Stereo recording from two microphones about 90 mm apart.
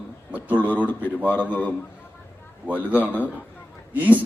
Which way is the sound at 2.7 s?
15° right (ahead or behind).